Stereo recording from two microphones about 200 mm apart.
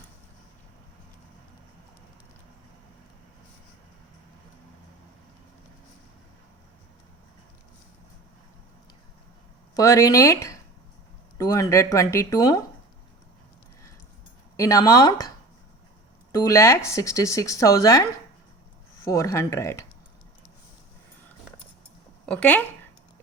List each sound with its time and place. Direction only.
9.7 s speech: 15° left (ahead or behind)
14.5 s speech: 15° left (ahead or behind)
16.4 s speech: 15° left (ahead or behind)
19.0 s speech: 15° left (ahead or behind)
22.3 s speech: 5° left (ahead or behind)